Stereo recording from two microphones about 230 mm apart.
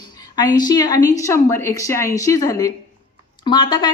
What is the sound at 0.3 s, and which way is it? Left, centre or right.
A woman's voice, centre.